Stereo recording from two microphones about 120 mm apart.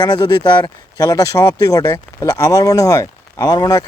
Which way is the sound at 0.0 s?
35° left (ahead or behind).